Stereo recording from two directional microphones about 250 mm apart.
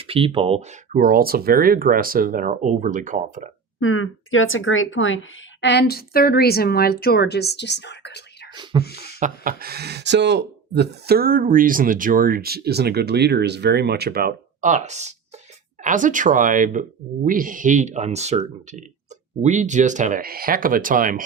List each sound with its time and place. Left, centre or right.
0.0 s speech: right
3.8 s speech: left
8.5 s speech: centre
8.8 s speech: left
9.1 s speech: right